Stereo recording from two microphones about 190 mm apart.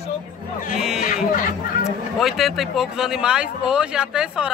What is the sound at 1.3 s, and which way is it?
Speech, 45° left (ahead or behind).